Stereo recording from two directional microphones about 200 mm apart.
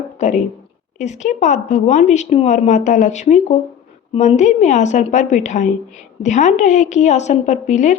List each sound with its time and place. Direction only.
0.2 s a woman's voice: 35° left (ahead or behind)